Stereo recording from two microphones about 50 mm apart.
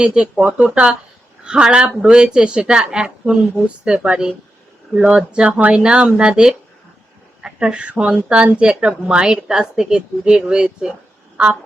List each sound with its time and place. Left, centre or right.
0.0 s speech: centre